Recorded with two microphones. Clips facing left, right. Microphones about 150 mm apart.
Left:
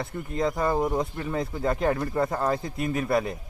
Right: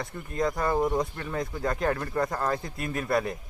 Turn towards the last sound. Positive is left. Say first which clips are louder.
# left 2 dB
turn(degrees=0)  # may be behind; listen again after turning